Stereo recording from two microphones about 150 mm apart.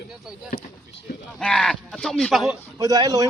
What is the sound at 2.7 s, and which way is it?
Speech, 25° right (ahead or behind).